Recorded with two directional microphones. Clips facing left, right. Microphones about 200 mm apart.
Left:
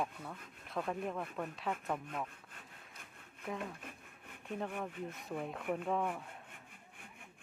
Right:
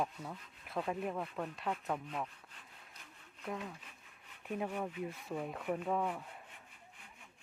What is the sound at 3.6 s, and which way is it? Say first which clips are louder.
Rub: left 2 dB; 55° left (ahead or behind).